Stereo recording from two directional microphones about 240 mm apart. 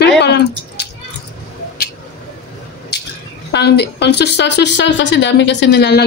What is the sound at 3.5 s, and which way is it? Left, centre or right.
A woman's voice, left.